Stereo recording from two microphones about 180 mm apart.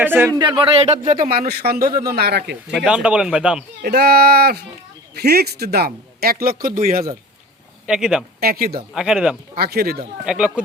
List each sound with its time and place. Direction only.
0.0 s speech: 10° right (ahead or behind); by 2.6 s 65° right (ahead or behind)
2.7 s speech: 5° right (ahead or behind)
3.8 s speech: 60° right (ahead or behind)
7.9 s speech: 5° right (ahead or behind)
8.4 s speech: 55° right (ahead or behind)
9.0 s speech: 5° right (ahead or behind)
9.6 s speech: 60° right (ahead or behind)
10.2 s speech: 5° right (ahead or behind)